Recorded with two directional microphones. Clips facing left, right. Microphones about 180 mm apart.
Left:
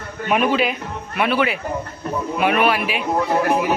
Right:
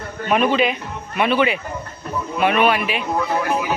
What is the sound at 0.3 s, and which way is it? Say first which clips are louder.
Speech: right 1 dB; 10° left (ahead or behind).